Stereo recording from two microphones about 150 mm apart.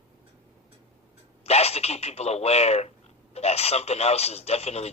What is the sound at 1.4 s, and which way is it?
Speech, 45° left (ahead or behind).